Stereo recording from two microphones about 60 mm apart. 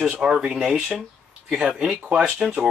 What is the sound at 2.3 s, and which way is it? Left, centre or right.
Speech, centre.